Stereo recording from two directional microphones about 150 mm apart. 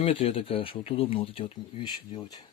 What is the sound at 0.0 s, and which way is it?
Speech, 40° left (ahead or behind).